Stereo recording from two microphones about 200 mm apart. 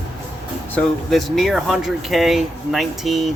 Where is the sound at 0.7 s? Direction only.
5° left (ahead or behind).